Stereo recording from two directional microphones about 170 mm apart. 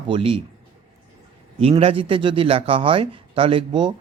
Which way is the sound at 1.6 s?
35° right (ahead or behind).